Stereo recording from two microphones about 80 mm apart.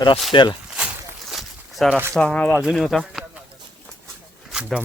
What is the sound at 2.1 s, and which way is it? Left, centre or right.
Speech, centre.